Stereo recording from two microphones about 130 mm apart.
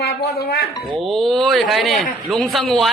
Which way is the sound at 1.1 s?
Centre (ahead or behind).